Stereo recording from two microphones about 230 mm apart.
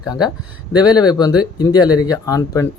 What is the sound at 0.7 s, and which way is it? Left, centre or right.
Speech, centre.